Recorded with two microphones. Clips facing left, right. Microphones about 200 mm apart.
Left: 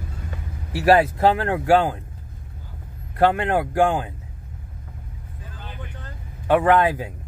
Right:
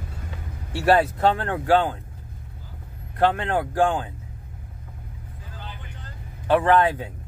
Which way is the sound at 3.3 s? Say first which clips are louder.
Left 3 dB; 10° left (ahead or behind).